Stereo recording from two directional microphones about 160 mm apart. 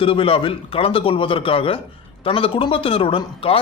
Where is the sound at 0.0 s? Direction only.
35° left (ahead or behind).